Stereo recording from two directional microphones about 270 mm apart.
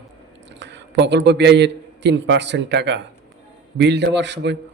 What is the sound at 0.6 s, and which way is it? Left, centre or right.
A man's voice, right.